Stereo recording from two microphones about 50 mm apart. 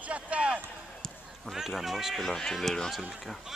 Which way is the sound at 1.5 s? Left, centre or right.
Centre.